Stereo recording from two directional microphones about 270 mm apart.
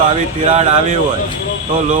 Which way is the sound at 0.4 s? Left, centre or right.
Right.